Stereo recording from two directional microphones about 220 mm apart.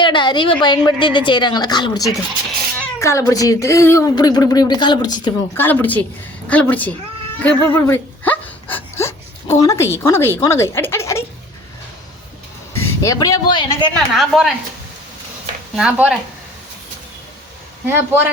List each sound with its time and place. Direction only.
0.0 s a woman's voice: 20° left (ahead or behind)
5.6 s speech: 10° left (ahead or behind)
7.4 s a sound: 10° left (ahead or behind)
12.8 s speech: 15° left (ahead or behind)
13.9 s a woman's voice: centre (ahead or behind)
15.7 s a woman's voice: 5° right (ahead or behind)
17.8 s speech: 10° right (ahead or behind)